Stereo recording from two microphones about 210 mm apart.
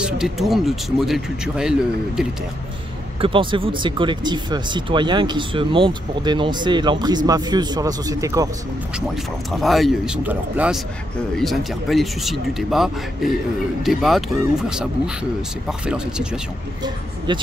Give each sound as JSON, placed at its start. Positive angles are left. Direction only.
{"t": 0.0, "sound": "speech", "side_deg": 0}
{"t": 3.2, "sound": "speech", "side_deg": -25}
{"t": 9.1, "sound": "speech", "side_deg": 0}
{"t": 17.3, "sound": "speech", "side_deg": -20}